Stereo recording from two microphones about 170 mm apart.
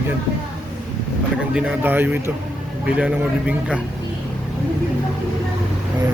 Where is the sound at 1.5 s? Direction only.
5° right (ahead or behind).